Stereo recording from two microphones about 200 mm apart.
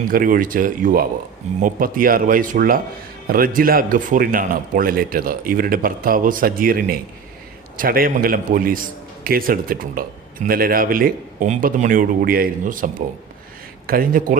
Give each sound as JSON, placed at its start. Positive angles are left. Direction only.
{"t": 0.1, "sound": "a man's voice", "side_deg": -45}